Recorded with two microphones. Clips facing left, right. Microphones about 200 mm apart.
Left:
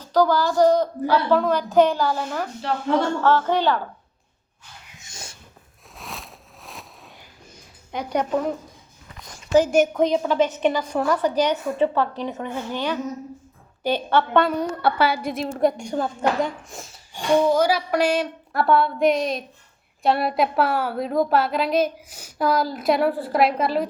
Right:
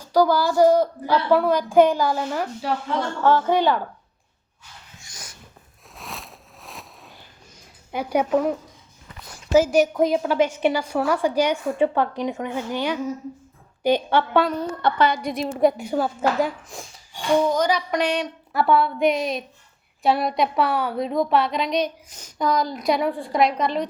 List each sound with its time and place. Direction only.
0.0 s a woman's voice: 10° right (ahead or behind)
4.9 s dog: 25° left (ahead or behind)
6.0 s a sound: centre (ahead or behind)
7.9 s a woman's voice: 10° right (ahead or behind)
14.4 s a woman's voice: 10° left (ahead or behind)